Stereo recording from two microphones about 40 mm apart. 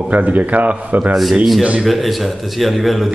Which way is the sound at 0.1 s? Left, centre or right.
Right.